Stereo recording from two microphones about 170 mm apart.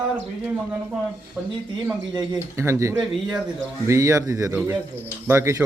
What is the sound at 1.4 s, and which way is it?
Speech, 10° right (ahead or behind).